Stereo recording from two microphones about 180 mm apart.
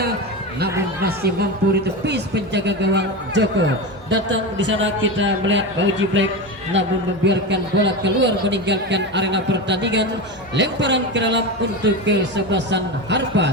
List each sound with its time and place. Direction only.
0.6 s speech: 65° right (ahead or behind); by 6.9 s 90° right
7.3 s a man's voice: 80° right